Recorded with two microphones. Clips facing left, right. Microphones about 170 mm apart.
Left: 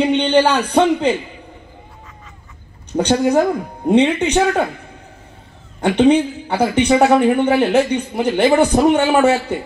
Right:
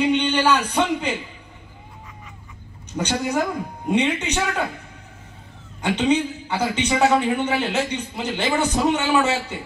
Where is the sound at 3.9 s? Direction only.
55° left (ahead or behind).